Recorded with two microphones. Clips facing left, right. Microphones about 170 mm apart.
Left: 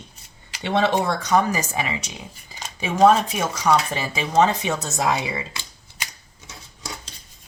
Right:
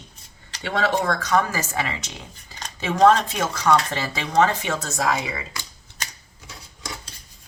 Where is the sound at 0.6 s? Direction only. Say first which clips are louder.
Left 2 dB; 25° left (ahead or behind).